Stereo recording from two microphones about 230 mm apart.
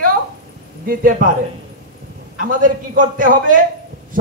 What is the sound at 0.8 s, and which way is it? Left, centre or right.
Speech, right.